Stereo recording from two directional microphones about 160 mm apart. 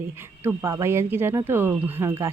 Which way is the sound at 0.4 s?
15° right (ahead or behind).